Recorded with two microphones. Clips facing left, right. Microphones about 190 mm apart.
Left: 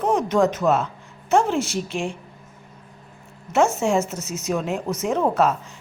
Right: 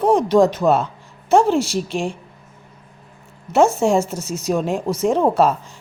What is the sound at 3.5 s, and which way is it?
A woman's voice, 35° right (ahead or behind).